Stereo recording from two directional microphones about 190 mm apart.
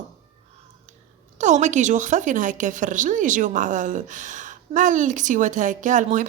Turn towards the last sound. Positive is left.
turn(degrees=-40)  # may be behind; listen again after turning